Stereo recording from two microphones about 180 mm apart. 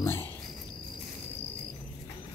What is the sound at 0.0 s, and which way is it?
Speech, 15° left (ahead or behind).